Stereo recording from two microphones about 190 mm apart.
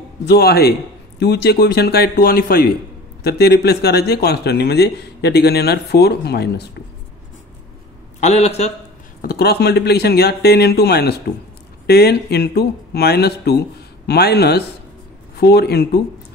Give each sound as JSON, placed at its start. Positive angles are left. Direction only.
{"t": 0.3, "sound": "speech", "side_deg": 55}
{"t": 8.2, "sound": "a man's voice", "side_deg": 35}
{"t": 9.2, "sound": "speech", "side_deg": 55}